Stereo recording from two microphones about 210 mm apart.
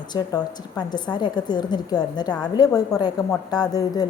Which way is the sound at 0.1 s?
20° left (ahead or behind).